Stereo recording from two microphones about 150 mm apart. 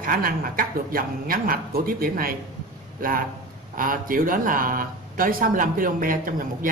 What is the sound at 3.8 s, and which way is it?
Speech, 70° right (ahead or behind).